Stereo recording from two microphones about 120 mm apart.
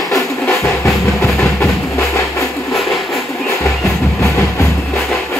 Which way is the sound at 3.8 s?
25° left (ahead or behind).